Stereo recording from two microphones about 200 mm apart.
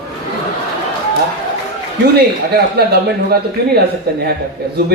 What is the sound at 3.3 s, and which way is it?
Speech, 50° right (ahead or behind).